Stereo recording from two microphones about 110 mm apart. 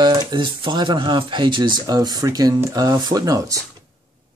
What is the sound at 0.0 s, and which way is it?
Speech, 40° right (ahead or behind).